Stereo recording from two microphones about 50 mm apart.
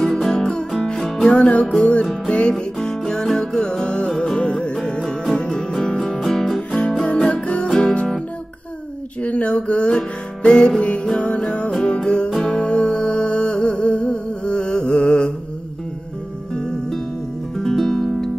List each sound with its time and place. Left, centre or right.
0.0 s music: centre
1.3 s music: left
2.5 s music: centre
5.0 s music: centre
7.2 s music: left
9.2 s music: left
16.5 s music: centre